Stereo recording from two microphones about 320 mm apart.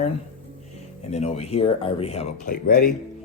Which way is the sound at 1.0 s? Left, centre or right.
Centre.